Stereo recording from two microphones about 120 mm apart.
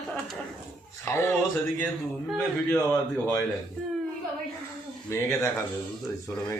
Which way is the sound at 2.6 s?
20° left (ahead or behind).